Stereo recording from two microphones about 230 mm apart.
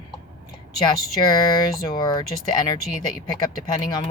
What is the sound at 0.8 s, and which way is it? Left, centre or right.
Speech, centre.